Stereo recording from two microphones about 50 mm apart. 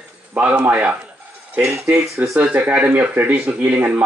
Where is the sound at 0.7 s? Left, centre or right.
Right.